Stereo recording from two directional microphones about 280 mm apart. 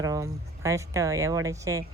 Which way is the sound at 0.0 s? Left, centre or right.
Centre.